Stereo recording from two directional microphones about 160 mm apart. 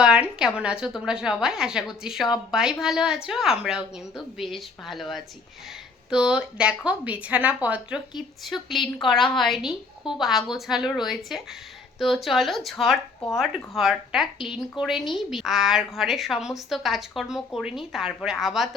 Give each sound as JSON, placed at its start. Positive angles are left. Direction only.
{"t": 0.0, "sound": "speech", "side_deg": -5}